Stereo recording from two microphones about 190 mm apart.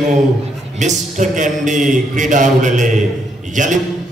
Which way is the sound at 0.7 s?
40° right (ahead or behind).